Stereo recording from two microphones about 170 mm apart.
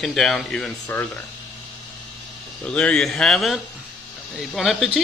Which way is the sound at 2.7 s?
5° left (ahead or behind).